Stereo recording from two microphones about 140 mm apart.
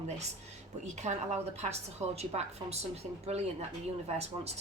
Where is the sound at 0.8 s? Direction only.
55° right (ahead or behind).